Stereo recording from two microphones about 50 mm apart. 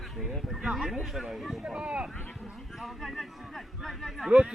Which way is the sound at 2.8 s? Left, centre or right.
Centre.